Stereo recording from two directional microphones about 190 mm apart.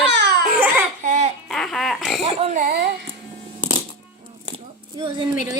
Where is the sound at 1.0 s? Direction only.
40° right (ahead or behind).